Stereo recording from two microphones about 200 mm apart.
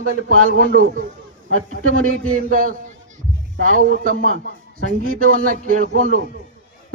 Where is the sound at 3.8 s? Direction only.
40° right (ahead or behind).